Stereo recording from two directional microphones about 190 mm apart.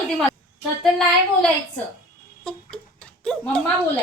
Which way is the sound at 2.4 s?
5° left (ahead or behind).